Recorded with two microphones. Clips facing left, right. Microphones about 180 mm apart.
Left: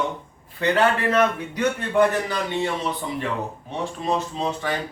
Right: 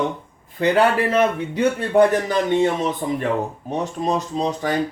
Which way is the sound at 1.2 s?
30° right (ahead or behind).